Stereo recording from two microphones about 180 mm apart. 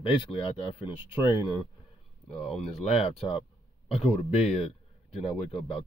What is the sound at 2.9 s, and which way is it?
Speech, 35° left (ahead or behind).